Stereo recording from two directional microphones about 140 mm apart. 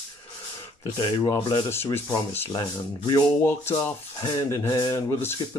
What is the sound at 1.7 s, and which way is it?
Speech, 15° left (ahead or behind).